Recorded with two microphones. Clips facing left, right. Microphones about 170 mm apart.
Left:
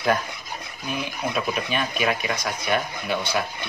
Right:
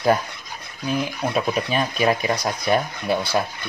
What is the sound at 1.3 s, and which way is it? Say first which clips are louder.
Speech: right 4 dB; 35° right (ahead or behind).